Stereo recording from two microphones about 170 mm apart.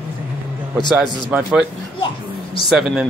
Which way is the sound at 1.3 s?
5° right (ahead or behind).